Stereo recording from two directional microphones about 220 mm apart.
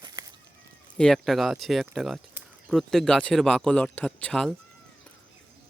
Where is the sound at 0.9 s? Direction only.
5° left (ahead or behind).